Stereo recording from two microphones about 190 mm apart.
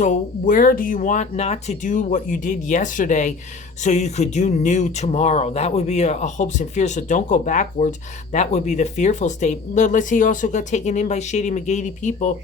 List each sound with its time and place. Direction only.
0.0 s speech: 45° left (ahead or behind)